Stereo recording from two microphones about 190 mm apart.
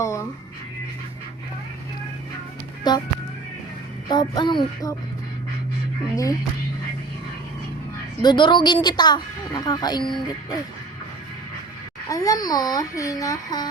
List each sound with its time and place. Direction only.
0.0 s speech: 15° left (ahead or behind)
2.9 s a woman's voice: 20° left (ahead or behind)
4.1 s a woman's voice: 20° left (ahead or behind)
8.2 s a woman's voice: 25° left (ahead or behind)
12.0 s a woman's voice: 20° left (ahead or behind)